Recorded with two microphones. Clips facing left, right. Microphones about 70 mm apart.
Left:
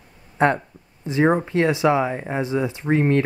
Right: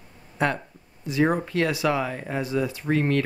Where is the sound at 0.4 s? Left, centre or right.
Left.